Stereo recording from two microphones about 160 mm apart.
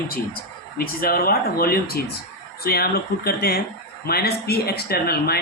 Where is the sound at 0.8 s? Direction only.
70° left (ahead or behind).